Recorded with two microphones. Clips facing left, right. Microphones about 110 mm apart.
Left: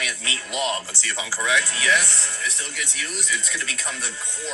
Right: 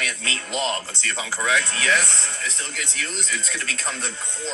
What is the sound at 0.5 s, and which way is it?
Speech, 15° left (ahead or behind).